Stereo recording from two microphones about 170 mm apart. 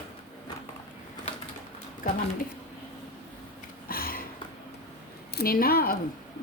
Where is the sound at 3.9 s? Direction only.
60° left (ahead or behind).